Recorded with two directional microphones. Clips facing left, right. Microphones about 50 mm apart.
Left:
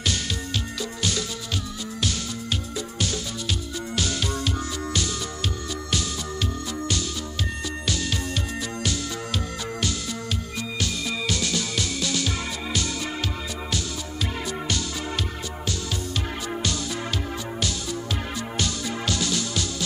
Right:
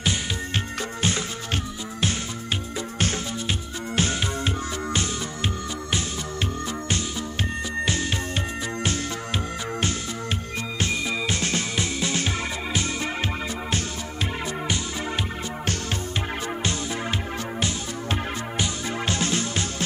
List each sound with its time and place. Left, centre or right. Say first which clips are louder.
0.5 s music: right 1 dB; right
7.8 s music: right 1 dB; right
10.8 s music: right 3 dB; right
15.6 s music: right 1 dB; right
16.6 s music: right 1 dB; right